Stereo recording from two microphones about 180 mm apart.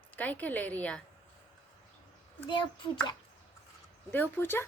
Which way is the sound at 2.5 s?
25° left (ahead or behind).